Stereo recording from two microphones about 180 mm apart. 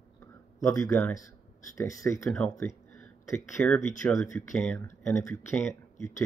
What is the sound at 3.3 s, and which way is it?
Speech, 15° left (ahead or behind).